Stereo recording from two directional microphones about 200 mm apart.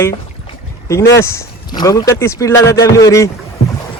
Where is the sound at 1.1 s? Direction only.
15° left (ahead or behind).